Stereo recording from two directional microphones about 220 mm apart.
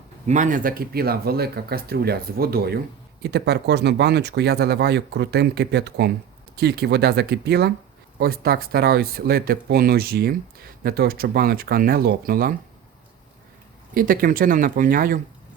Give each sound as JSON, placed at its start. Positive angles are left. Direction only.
{"t": 0.3, "sound": "speech", "side_deg": -35}
{"t": 13.9, "sound": "speech", "side_deg": -40}